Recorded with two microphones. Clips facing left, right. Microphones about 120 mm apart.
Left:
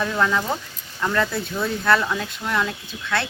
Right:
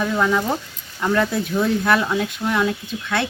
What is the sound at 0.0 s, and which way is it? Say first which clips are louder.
Speech: right 2 dB; 10° right (ahead or behind).